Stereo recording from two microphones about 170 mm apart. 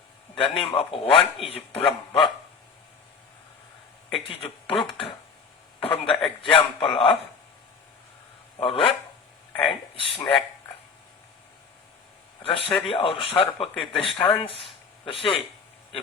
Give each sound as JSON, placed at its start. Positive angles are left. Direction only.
{"t": 0.3, "sound": "speech", "side_deg": 30}
{"t": 4.3, "sound": "speech", "side_deg": 30}
{"t": 5.8, "sound": "speech", "side_deg": 35}
{"t": 8.5, "sound": "speech", "side_deg": 35}
{"t": 12.4, "sound": "speech", "side_deg": 30}